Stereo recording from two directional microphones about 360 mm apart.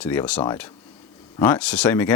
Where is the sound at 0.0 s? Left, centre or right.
Centre.